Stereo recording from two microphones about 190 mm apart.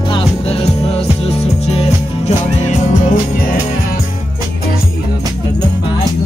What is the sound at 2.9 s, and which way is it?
Music, 45° left (ahead or behind).